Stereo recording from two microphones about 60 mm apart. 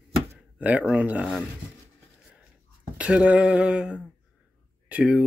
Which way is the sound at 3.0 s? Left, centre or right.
Right.